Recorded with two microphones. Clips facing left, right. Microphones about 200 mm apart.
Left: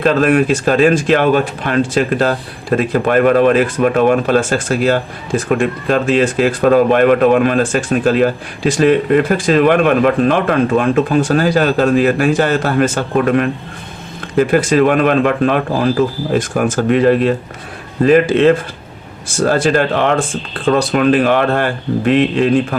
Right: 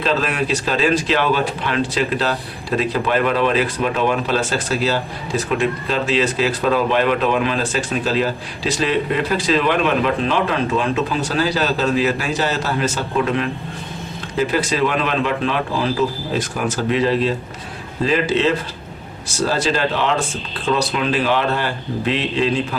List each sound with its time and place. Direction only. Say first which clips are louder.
0.0 s speech: left 8 dB; 50° left (ahead or behind)